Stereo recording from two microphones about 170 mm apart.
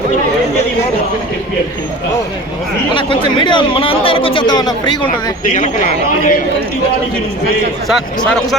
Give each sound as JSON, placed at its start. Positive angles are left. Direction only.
{"t": 2.9, "sound": "speech", "side_deg": 30}
{"t": 5.5, "sound": "speech", "side_deg": 50}